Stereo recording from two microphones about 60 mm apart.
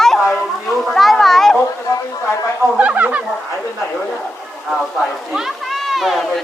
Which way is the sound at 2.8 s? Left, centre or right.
Right.